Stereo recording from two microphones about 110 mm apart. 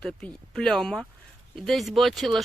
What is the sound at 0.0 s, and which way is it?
Speech, 5° left (ahead or behind).